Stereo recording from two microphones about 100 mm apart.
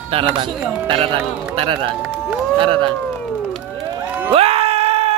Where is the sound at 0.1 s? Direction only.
60° right (ahead or behind).